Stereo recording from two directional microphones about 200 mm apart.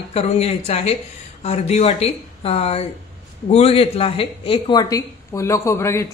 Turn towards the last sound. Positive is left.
turn(degrees=15)  # may be behind; listen again after turning